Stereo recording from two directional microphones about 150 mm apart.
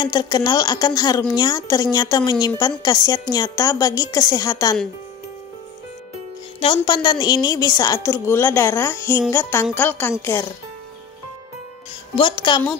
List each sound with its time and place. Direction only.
0.0 s a woman's voice: 30° left (ahead or behind)
6.6 s a woman's voice: 30° left (ahead or behind)
12.2 s a woman's voice: 30° left (ahead or behind)